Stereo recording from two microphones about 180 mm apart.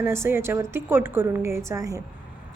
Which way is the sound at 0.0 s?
15° right (ahead or behind).